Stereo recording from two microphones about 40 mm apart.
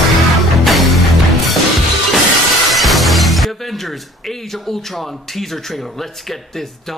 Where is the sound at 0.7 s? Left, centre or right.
Centre.